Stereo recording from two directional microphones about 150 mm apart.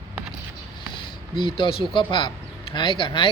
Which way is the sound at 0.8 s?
35° left (ahead or behind).